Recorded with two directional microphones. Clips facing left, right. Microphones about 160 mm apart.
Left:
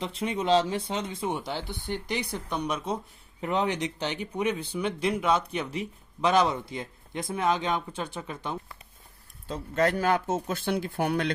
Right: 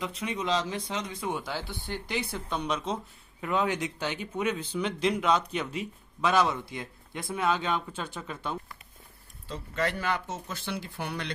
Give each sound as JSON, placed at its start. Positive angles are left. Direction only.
{"t": 0.0, "sound": "speech", "side_deg": 30}
{"t": 3.4, "sound": "speech", "side_deg": 20}
{"t": 9.5, "sound": "speech", "side_deg": 45}